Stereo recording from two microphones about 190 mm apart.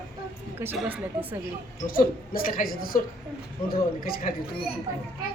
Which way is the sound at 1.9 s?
50° left (ahead or behind).